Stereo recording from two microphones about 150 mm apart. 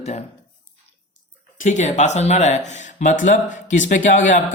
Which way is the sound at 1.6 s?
55° left (ahead or behind).